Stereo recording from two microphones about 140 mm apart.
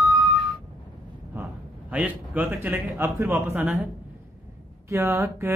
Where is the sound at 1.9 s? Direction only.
10° right (ahead or behind).